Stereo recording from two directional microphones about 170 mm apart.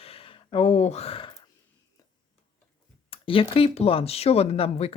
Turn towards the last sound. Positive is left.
turn(degrees=35)  # may be behind; listen again after turning